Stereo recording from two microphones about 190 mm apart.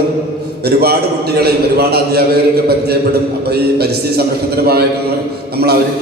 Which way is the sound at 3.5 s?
55° right (ahead or behind).